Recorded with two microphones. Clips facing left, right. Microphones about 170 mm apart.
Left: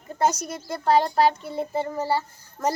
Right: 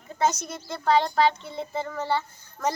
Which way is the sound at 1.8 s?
35° left (ahead or behind).